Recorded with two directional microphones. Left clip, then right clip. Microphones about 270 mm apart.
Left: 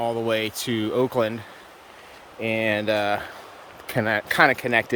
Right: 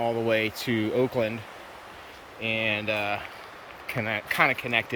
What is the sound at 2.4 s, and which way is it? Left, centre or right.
Speech, left.